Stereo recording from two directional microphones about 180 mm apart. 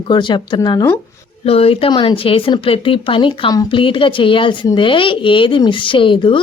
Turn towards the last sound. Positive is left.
turn(degrees=30)  # may be behind; listen again after turning